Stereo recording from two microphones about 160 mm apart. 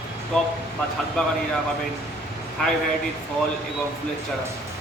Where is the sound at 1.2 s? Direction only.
5° left (ahead or behind).